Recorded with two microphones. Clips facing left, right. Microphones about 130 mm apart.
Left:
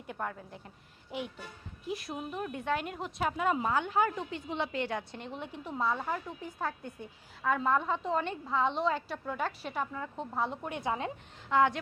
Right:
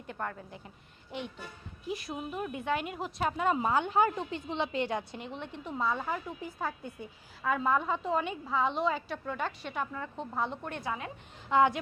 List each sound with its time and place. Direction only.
0.1 s a woman's voice: 5° left (ahead or behind)
3.6 s a woman's voice: 20° right (ahead or behind)
5.2 s a woman's voice: 5° left (ahead or behind)
11.4 s speech: 15° right (ahead or behind)